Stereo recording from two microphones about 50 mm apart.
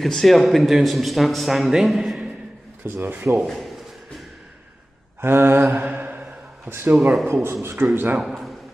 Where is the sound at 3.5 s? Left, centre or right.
Centre.